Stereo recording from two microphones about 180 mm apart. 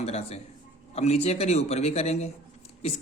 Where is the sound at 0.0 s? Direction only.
35° left (ahead or behind).